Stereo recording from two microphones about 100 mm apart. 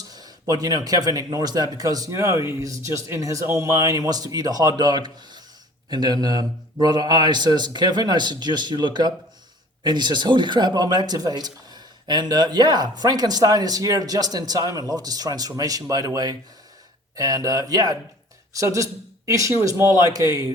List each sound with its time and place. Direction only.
0.1 s a man's voice: 40° right (ahead or behind)